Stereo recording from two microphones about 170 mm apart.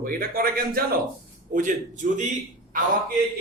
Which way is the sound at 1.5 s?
50° right (ahead or behind).